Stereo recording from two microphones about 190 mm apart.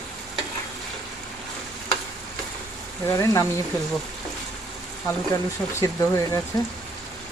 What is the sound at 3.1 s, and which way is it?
Speech, 15° left (ahead or behind).